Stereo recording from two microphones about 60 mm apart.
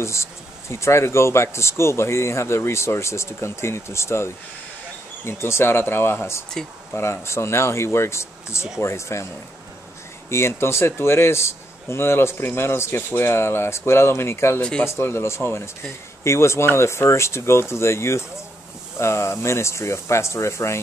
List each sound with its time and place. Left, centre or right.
0.0 s speech: left
10.3 s speech: left
14.6 s speech: centre
14.9 s speech: left